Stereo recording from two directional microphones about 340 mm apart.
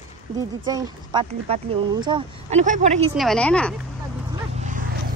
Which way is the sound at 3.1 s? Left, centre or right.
Centre.